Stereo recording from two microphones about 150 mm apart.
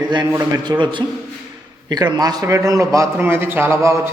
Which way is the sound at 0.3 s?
15° right (ahead or behind).